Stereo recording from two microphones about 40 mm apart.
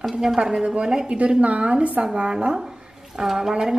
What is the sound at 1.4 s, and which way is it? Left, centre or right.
A woman's voice, right.